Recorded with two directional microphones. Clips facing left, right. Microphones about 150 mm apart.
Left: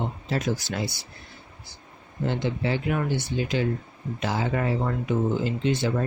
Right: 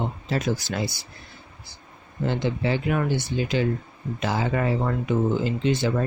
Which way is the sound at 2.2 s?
90° right.